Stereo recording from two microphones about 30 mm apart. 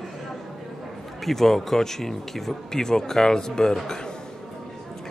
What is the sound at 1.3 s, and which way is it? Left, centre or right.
Speech, centre.